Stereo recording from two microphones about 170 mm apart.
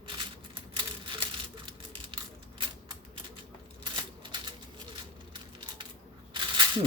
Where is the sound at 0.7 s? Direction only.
30° right (ahead or behind).